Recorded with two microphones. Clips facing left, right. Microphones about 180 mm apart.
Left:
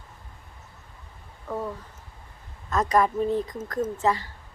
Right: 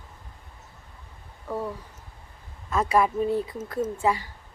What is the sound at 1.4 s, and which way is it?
Speech, 10° right (ahead or behind).